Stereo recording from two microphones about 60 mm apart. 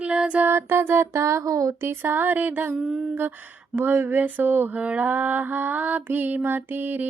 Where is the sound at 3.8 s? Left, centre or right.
Right.